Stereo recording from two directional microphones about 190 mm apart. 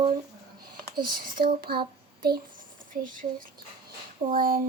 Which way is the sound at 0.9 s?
50° right (ahead or behind).